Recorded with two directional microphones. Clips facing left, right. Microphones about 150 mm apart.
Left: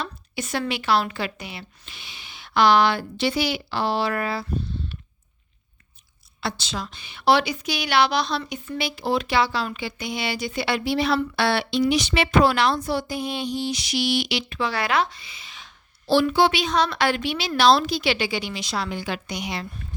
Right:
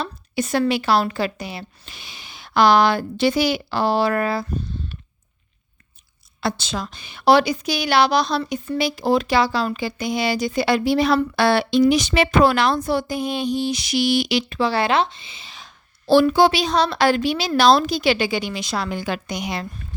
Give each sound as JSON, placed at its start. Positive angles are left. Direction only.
{"t": 0.0, "sound": "a woman's voice", "side_deg": -40}
{"t": 6.4, "sound": "a woman's voice", "side_deg": -50}